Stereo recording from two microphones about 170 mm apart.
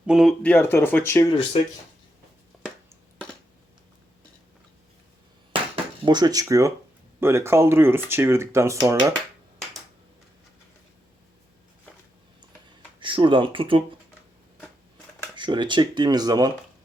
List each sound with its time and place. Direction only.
0.0 s speech: 5° right (ahead or behind)
0.5 s speech: 15° left (ahead or behind)
5.5 s dishes: 30° right (ahead or behind)
7.2 s speech: 15° right (ahead or behind)
13.0 s speech: 30° right (ahead or behind)
15.4 s speech: 30° right (ahead or behind)